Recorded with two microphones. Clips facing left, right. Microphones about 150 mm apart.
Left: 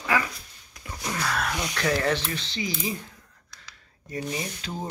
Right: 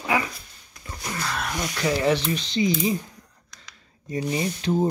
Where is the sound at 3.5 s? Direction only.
20° right (ahead or behind).